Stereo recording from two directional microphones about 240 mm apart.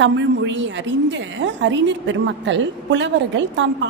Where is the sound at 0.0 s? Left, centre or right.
Right.